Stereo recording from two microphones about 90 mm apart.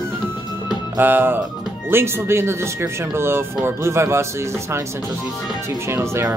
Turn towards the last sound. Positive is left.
turn(degrees=-30)  # may be behind; listen again after turning